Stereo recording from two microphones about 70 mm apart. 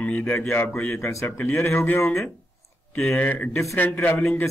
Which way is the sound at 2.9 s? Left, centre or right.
Left.